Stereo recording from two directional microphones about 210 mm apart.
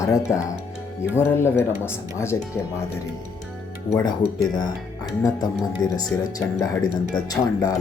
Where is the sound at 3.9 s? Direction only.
10° left (ahead or behind).